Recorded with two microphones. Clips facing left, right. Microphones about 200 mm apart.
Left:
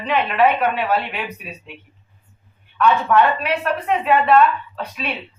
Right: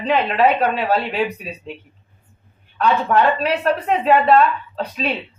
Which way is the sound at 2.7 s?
35° right (ahead or behind).